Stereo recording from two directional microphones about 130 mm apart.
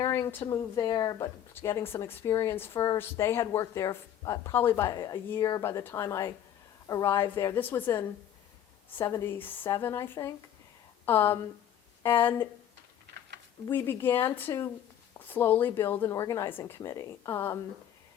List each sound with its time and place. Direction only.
0.0 s speech: 20° left (ahead or behind)
0.4 s a woman's voice: 30° left (ahead or behind)
13.7 s speech: 15° left (ahead or behind)